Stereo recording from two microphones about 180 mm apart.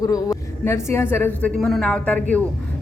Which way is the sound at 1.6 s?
Centre (ahead or behind).